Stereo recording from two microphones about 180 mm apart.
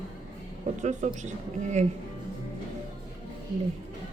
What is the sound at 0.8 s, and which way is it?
A woman's voice, 40° right (ahead or behind).